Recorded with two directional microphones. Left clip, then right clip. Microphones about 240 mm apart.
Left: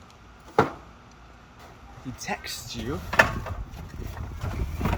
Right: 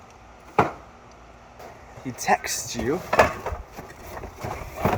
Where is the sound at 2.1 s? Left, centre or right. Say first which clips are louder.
Right 11 dB; centre.